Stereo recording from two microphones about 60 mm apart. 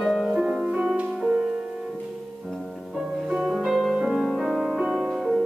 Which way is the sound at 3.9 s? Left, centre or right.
Centre.